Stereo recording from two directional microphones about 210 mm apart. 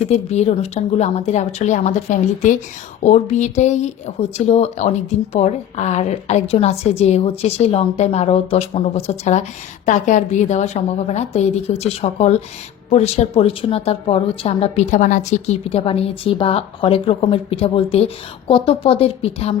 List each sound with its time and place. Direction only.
0.0 s a woman's voice: 30° left (ahead or behind)